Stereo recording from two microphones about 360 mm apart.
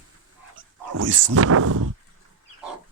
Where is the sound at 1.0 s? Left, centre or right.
Right.